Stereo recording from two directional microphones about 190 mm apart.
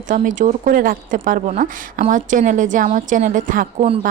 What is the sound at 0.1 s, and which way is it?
Speech, 40° right (ahead or behind).